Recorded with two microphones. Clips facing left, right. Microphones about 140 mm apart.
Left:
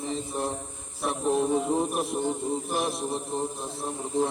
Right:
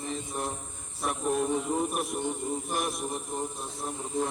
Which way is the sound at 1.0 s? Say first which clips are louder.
Left 3 dB; 25° left (ahead or behind).